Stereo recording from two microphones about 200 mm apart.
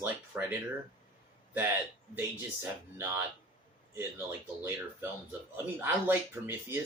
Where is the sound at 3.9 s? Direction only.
10° right (ahead or behind).